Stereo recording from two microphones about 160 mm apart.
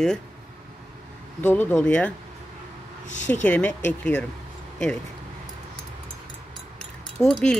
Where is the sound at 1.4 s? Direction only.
10° left (ahead or behind).